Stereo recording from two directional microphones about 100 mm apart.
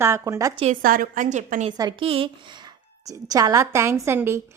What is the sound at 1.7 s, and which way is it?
Speech, 40° right (ahead or behind).